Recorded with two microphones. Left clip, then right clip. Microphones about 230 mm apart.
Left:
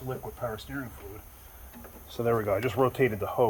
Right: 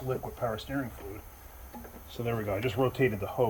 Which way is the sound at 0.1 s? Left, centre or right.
Centre.